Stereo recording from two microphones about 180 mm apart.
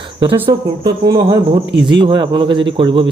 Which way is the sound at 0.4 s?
25° right (ahead or behind).